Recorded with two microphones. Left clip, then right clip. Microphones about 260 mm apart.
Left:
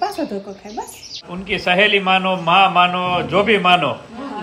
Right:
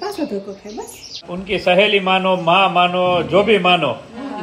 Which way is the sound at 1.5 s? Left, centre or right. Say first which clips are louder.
Right 1 dB; centre.